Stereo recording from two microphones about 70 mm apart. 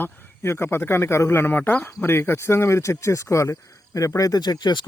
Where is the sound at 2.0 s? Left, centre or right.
Left.